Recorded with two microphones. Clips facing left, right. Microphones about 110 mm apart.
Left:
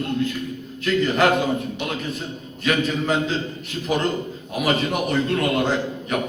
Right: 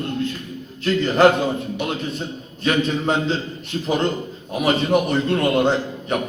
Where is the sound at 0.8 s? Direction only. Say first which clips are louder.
Right 4 dB; 30° right (ahead or behind).